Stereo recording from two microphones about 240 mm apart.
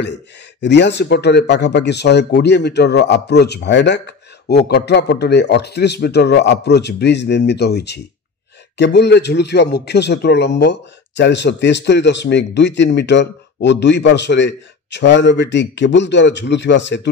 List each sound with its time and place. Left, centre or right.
0.0 s a man's voice: left